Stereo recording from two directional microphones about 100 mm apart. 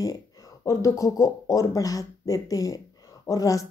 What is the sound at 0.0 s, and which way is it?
A woman's voice, 35° left (ahead or behind).